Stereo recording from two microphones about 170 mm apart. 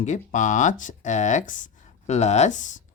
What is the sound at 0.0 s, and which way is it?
Speech, 45° left (ahead or behind).